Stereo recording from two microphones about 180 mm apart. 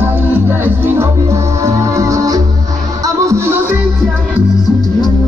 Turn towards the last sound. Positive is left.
turn(degrees=-15)  # may be behind; listen again after turning